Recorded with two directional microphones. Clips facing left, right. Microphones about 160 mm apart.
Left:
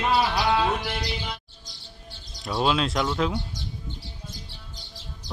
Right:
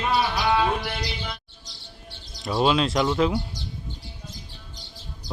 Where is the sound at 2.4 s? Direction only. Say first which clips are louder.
Right 3 dB; centre (ahead or behind).